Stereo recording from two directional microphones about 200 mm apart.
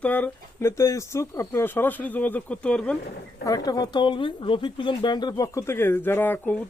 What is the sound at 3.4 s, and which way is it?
Speech, 20° left (ahead or behind).